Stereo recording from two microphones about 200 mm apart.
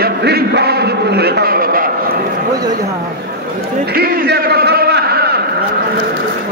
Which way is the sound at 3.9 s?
50° right (ahead or behind).